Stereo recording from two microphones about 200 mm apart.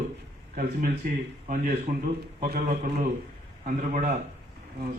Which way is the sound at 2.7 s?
30° right (ahead or behind).